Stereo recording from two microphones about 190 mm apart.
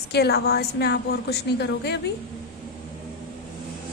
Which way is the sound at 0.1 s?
60° left (ahead or behind).